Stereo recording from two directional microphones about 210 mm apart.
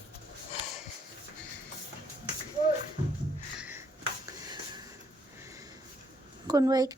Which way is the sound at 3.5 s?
5° right (ahead or behind).